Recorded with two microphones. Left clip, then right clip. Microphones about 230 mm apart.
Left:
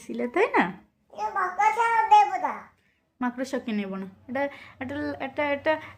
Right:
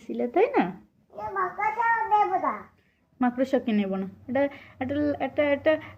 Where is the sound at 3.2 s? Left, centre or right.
Centre.